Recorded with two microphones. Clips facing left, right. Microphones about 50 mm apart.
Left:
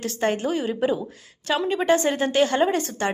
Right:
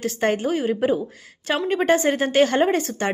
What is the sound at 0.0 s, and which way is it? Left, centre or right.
Speech, right.